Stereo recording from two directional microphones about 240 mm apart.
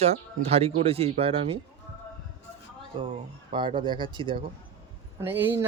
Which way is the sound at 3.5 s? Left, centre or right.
Right.